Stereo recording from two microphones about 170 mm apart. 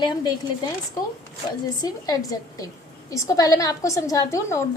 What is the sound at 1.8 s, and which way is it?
A woman's voice, 20° left (ahead or behind).